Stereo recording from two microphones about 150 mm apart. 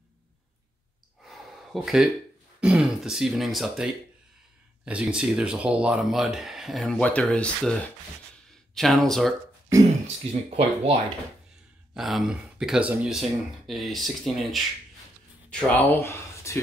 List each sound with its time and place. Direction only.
1.2 s a sound: centre (ahead or behind)
2.6 s speech: 5° right (ahead or behind)
8.7 s speech: centre (ahead or behind)
10.3 s speech: 40° right (ahead or behind)
11.9 s speech: centre (ahead or behind)
15.5 s speech: 10° left (ahead or behind)